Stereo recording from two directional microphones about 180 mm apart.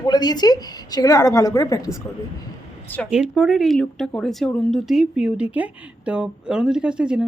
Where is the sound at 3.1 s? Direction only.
5° right (ahead or behind).